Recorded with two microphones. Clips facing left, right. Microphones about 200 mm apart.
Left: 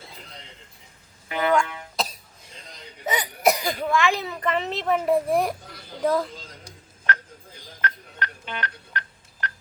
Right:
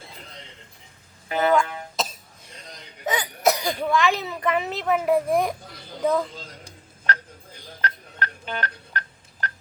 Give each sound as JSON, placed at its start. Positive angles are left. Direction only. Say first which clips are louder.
{"t": 1.3, "sound": "music", "louder": "right 2 dB", "side_deg": -35}
{"t": 3.1, "sound": "a woman's voice", "louder": "even", "side_deg": 10}
{"t": 7.8, "sound": "telephone dialing", "louder": "right 1 dB", "side_deg": -40}